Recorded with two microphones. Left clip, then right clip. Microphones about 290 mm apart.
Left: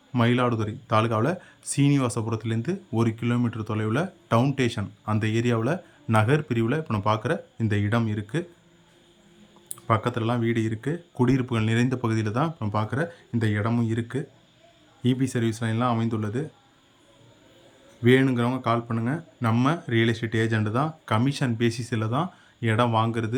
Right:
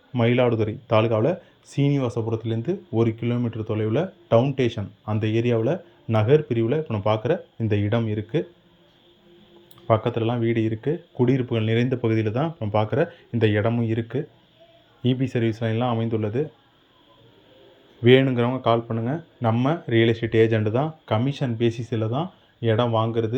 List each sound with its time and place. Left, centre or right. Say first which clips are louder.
0.1 s speech: right 3 dB; centre
9.8 s speech: right 3 dB; centre
18.0 s speech: right 4 dB; centre